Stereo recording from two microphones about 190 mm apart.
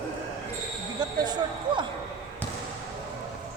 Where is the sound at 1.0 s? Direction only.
20° right (ahead or behind).